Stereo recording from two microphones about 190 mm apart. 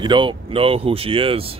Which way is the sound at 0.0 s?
25° right (ahead or behind).